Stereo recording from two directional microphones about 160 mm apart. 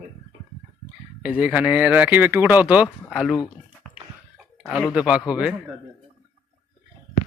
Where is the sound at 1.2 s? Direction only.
5° right (ahead or behind).